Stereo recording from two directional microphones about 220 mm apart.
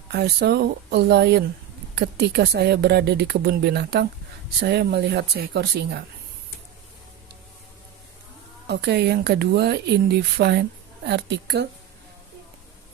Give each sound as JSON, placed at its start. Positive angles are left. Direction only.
{"t": 0.1, "sound": "speech", "side_deg": -50}
{"t": 8.6, "sound": "speech", "side_deg": -50}